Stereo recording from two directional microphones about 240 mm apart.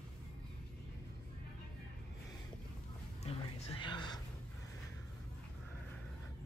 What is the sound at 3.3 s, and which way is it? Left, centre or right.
Speech, left.